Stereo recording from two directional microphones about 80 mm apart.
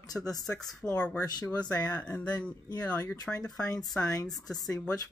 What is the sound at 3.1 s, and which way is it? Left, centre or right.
Speech, left.